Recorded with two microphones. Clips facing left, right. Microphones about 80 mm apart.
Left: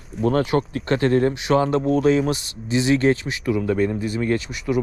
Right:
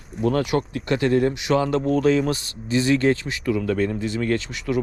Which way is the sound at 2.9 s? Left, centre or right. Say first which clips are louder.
Left 3 dB; left.